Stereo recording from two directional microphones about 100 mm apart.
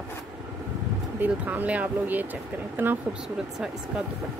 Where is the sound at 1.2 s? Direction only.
20° right (ahead or behind).